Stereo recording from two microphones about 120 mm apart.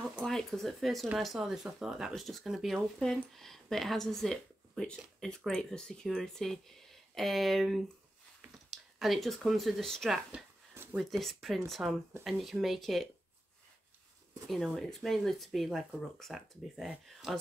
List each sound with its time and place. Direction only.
0.2 s speech: 5° left (ahead or behind)
10.7 s a sound: 20° right (ahead or behind)
11.0 s speech: centre (ahead or behind)
14.5 s speech: centre (ahead or behind)